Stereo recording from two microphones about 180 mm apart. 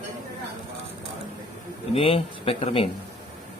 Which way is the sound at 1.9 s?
30° left (ahead or behind).